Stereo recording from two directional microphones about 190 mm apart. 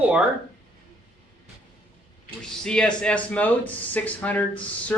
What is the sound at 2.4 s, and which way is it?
Speech, 5° left (ahead or behind).